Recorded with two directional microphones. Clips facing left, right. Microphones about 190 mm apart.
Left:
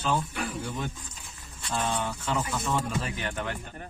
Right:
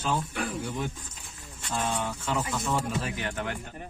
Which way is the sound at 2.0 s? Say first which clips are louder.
Even; 5° right (ahead or behind).